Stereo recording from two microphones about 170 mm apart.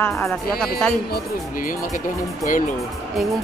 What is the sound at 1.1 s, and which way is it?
Speech, 60° left (ahead or behind).